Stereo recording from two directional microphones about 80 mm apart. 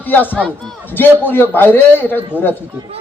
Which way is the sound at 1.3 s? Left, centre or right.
Left.